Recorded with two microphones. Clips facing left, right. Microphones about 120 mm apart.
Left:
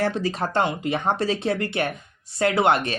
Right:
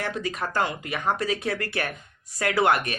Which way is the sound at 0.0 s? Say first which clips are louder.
Left 5 dB; 30° left (ahead or behind).